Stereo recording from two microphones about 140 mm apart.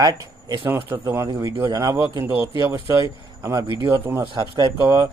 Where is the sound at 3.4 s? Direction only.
25° right (ahead or behind).